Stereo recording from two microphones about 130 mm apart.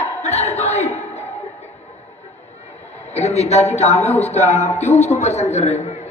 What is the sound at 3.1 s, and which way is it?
A man's voice, 55° left (ahead or behind).